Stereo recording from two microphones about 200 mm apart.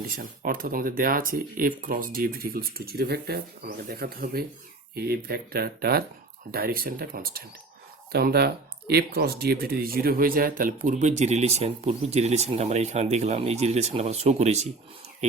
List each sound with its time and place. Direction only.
0.2 s speech: 45° right (ahead or behind)
15.2 s bird: 35° right (ahead or behind)